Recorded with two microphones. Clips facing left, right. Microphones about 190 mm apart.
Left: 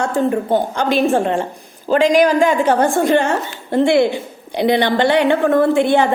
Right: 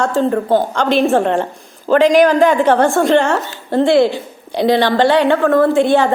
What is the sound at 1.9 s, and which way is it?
Speech, 50° right (ahead or behind).